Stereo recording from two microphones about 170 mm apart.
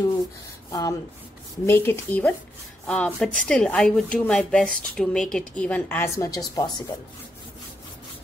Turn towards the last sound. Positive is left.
turn(degrees=25)  # may be behind; listen again after turning